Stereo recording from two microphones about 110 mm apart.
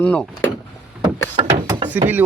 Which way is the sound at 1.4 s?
45° right (ahead or behind).